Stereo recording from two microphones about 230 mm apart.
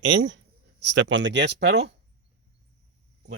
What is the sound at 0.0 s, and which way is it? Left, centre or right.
Speech, right.